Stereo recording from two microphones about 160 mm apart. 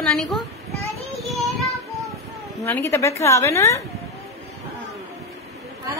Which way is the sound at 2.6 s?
15° left (ahead or behind).